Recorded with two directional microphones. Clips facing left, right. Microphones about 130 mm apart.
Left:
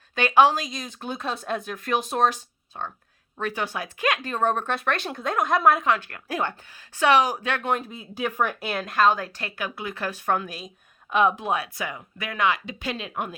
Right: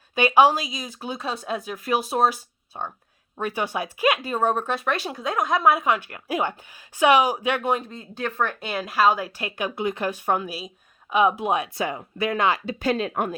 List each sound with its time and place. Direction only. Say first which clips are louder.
0.2 s speech: right 1 dB; 10° right (ahead or behind)
7.8 s speech: left 1 dB; 10° left (ahead or behind)
8.7 s speech: right 1 dB; 5° right (ahead or behind); by 13.3 s 45° right (ahead or behind)